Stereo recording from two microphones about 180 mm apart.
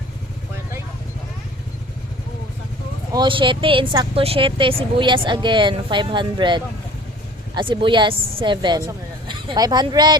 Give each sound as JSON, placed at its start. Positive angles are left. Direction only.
{"t": 3.1, "sound": "speech", "side_deg": -25}